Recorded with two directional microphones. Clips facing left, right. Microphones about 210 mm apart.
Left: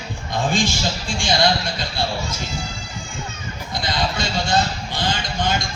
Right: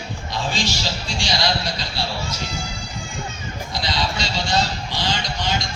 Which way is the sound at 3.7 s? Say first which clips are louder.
Left 2 dB; 50° left (ahead or behind).